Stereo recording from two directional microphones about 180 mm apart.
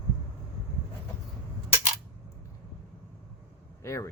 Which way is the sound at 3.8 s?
15° left (ahead or behind).